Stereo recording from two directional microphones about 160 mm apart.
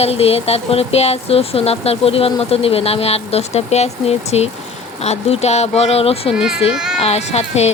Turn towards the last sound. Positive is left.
turn(degrees=40)  # may be behind; listen again after turning